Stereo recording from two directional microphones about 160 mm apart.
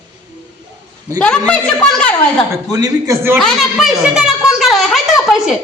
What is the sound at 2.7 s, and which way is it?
Speech, 20° right (ahead or behind).